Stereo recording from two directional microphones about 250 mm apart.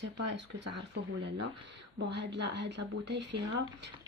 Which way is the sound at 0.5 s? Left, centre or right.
Right.